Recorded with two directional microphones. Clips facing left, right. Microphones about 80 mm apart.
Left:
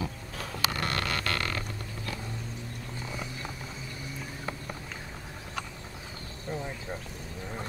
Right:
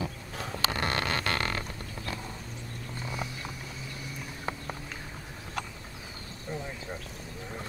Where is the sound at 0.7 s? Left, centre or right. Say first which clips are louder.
Right 1 dB; right.